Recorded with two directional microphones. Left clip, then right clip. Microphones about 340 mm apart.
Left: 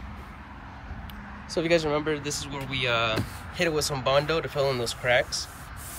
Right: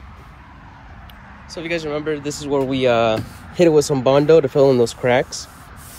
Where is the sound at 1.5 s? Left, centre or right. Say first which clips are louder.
Even; centre.